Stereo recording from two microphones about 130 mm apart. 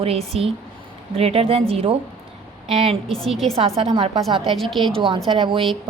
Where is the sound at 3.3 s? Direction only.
Centre (ahead or behind).